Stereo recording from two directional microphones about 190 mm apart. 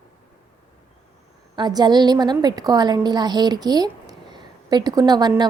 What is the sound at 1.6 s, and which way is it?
A woman's voice, 20° right (ahead or behind).